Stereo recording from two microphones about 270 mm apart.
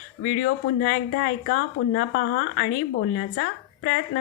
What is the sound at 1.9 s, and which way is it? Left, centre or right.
Speech, left.